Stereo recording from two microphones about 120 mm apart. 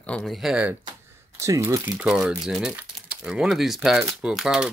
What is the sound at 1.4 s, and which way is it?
Speech, 25° right (ahead or behind).